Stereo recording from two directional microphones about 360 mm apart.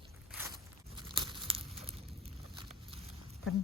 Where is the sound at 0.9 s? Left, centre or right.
Centre.